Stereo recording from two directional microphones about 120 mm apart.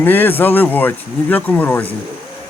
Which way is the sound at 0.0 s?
15° left (ahead or behind).